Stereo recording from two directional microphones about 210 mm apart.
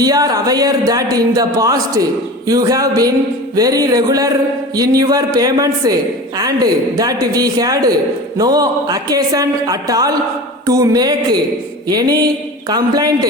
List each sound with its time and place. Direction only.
0.0 s a woman's voice: 15° right (ahead or behind)